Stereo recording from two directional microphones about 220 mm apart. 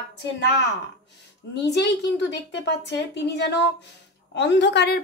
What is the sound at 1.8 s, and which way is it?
A woman's voice, 50° left (ahead or behind).